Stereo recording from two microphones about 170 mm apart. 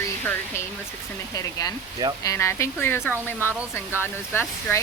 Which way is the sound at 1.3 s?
20° left (ahead or behind).